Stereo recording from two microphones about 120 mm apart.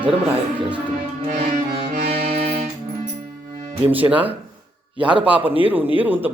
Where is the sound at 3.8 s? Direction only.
15° right (ahead or behind).